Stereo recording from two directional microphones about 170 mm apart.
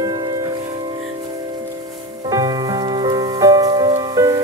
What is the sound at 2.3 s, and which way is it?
Music, 20° right (ahead or behind).